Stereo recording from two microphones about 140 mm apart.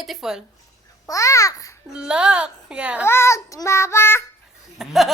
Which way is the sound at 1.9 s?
5° right (ahead or behind).